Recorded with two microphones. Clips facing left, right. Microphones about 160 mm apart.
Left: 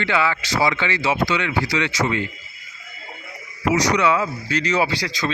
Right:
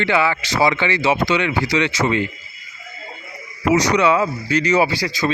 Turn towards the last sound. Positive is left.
turn(degrees=-10)  # may be behind; listen again after turning